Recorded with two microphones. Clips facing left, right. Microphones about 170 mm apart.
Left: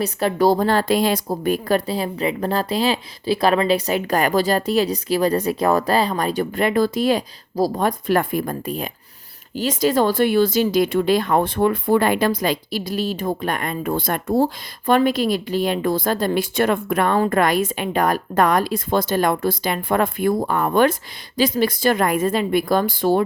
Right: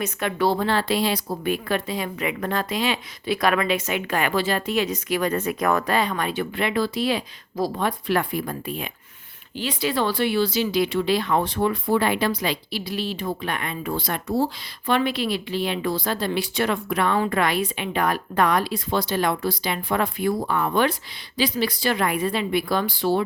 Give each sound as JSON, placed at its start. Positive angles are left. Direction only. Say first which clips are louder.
{"t": 0.0, "sound": "speech", "louder": "left 5 dB", "side_deg": 35}